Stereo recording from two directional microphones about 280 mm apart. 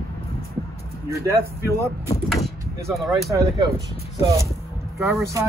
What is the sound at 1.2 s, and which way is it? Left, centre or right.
Speech, centre.